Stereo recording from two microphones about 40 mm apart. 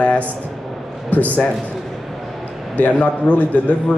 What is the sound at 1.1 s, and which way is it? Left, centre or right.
Speech, left.